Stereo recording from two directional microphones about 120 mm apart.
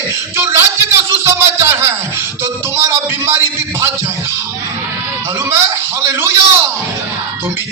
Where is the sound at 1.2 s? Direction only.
20° right (ahead or behind).